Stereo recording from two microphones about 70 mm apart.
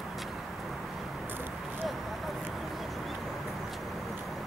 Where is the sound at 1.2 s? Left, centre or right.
Right.